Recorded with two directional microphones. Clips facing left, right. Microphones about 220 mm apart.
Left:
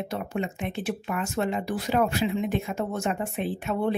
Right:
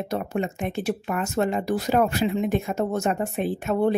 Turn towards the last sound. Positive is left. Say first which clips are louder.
# right 4 dB
turn(degrees=-45)  # may be behind; listen again after turning